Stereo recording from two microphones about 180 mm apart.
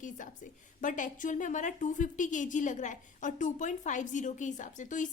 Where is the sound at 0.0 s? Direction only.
45° left (ahead or behind).